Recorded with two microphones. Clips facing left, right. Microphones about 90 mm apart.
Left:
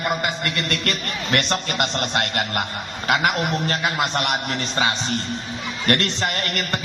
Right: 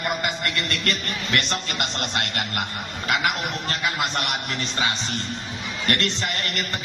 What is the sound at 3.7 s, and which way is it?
Speech, 45° left (ahead or behind).